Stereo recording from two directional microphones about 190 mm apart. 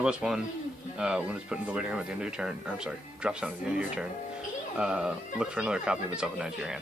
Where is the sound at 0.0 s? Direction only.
5° right (ahead or behind).